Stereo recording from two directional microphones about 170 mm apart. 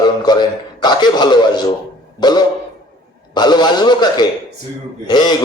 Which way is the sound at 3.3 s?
25° left (ahead or behind).